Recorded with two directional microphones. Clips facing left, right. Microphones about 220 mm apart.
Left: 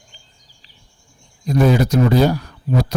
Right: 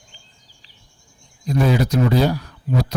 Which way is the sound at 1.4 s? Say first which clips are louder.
Left 3 dB; 45° left (ahead or behind).